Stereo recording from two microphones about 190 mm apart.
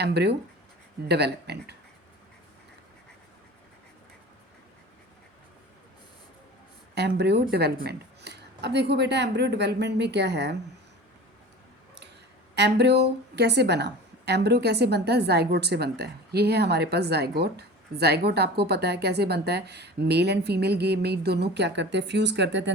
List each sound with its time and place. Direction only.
0.0 s a woman's voice: 60° right (ahead or behind)
6.9 s a woman's voice: 60° right (ahead or behind)
12.5 s a woman's voice: 60° right (ahead or behind)